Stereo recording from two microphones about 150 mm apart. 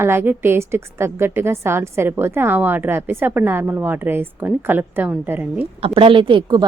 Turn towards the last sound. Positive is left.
turn(degrees=-30)  # may be behind; listen again after turning